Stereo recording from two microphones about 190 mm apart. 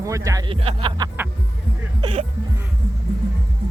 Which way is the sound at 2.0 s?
30° right (ahead or behind).